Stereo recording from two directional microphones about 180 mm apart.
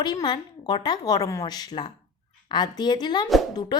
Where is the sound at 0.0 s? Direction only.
25° left (ahead or behind).